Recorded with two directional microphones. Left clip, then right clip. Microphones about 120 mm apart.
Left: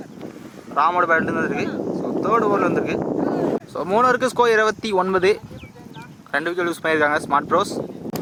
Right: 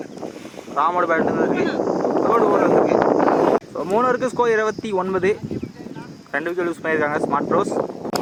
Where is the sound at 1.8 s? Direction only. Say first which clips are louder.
Right 5 dB; 45° right (ahead or behind).